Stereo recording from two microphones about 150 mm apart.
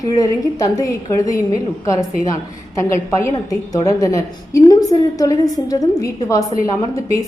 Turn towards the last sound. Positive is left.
turn(degrees=20)  # may be behind; listen again after turning